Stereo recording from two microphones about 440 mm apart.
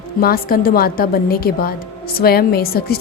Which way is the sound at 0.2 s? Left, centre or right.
Centre.